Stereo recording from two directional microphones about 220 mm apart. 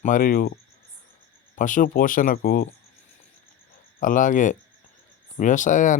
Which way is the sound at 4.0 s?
35° left (ahead or behind).